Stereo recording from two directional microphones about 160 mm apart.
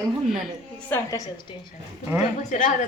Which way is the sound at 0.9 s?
15° left (ahead or behind).